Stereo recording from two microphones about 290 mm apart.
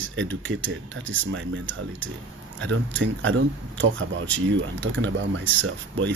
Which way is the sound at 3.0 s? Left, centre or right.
Right.